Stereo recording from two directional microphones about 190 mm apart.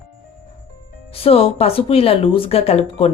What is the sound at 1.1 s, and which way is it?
Speech, 30° left (ahead or behind).